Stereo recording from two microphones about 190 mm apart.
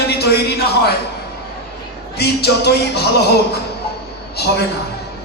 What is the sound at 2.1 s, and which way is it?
A man's voice, 60° left (ahead or behind).